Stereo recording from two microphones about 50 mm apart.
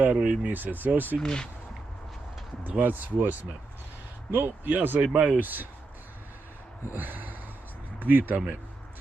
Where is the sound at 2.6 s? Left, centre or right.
Right.